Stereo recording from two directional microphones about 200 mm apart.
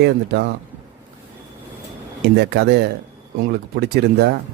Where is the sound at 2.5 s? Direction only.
55° right (ahead or behind).